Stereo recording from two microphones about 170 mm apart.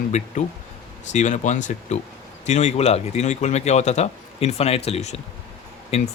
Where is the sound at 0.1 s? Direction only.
45° left (ahead or behind).